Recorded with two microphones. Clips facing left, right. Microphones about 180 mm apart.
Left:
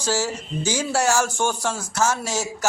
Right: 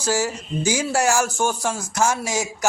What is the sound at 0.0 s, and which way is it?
Speech, 10° right (ahead or behind).